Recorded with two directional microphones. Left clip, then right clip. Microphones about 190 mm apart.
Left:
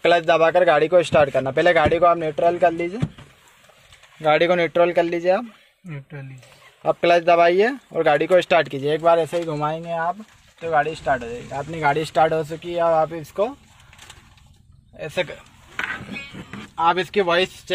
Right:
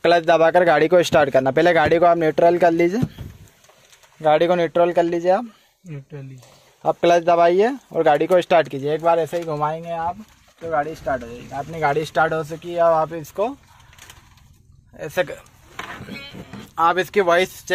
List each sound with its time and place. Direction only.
0.0 s speech: 15° right (ahead or behind)
4.2 s speech: 5° right (ahead or behind)
6.8 s speech: 5° right (ahead or behind)
15.0 s speech: 10° right (ahead or behind)